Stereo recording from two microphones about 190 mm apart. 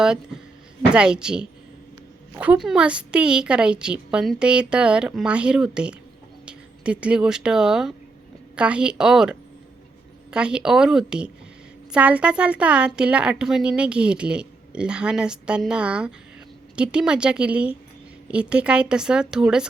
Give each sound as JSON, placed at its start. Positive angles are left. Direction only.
{"t": 0.0, "sound": "a woman's voice", "side_deg": -5}